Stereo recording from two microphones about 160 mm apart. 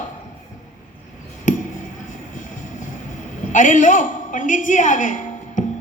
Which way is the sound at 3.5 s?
50° left (ahead or behind).